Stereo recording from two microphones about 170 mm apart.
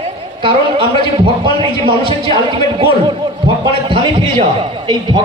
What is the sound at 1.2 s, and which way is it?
A man's voice, 30° right (ahead or behind).